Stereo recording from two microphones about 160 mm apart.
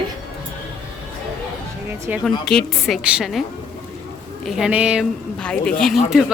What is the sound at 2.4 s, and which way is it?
Speech, 5° left (ahead or behind).